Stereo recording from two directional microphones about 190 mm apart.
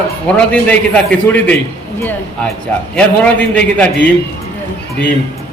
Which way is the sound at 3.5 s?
5° left (ahead or behind).